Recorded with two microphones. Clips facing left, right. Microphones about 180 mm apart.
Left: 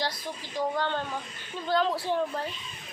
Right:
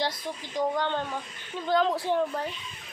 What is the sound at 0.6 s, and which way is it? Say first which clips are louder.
A woman's voice: right 2 dB; 15° right (ahead or behind).